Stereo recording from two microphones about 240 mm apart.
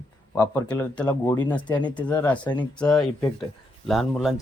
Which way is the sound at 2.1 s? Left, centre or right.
Centre.